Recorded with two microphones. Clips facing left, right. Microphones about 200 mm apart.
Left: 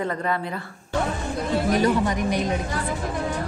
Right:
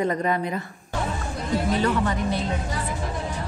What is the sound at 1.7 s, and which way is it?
Speech, 15° left (ahead or behind).